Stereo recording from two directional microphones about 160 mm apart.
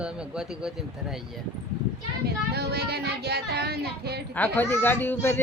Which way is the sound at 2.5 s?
90° right.